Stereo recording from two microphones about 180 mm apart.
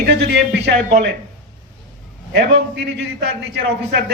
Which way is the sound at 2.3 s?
85° right.